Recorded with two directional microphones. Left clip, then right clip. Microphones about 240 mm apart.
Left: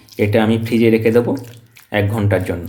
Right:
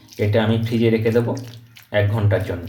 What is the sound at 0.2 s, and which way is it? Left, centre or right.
Speech, left.